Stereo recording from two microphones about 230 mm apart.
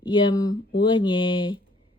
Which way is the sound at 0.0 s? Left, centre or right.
Centre.